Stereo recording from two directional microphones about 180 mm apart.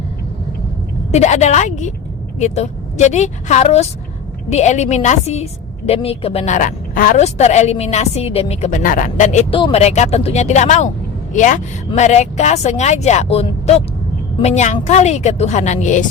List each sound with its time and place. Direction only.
1.1 s a woman's voice: 40° left (ahead or behind)
8.8 s a woman's voice: 45° left (ahead or behind)